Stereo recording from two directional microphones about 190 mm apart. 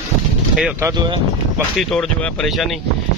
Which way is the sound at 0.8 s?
25° right (ahead or behind).